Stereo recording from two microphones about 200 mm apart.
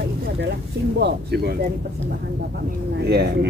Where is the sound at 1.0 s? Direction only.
55° right (ahead or behind).